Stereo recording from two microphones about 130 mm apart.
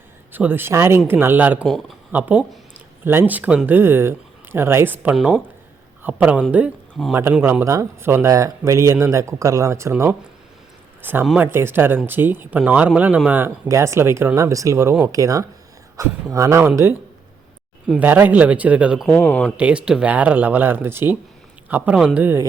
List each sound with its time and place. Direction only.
0.3 s speech: 15° right (ahead or behind)
5.1 s speech: centre (ahead or behind)
6.0 s speech: 10° right (ahead or behind)
7.6 s speech: 25° right (ahead or behind); by 19.0 s 10° right (ahead or behind)
19.0 s speech: 10° left (ahead or behind)
19.5 s speech: 10° right (ahead or behind)